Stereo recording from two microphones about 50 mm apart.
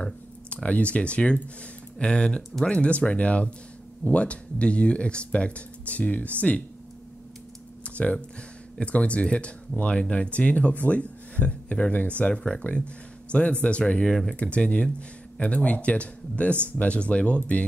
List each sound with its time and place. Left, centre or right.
0.0 s speech: left
7.8 s a sound: left
8.7 s speech: left
14.0 s speech: centre
14.3 s speech: left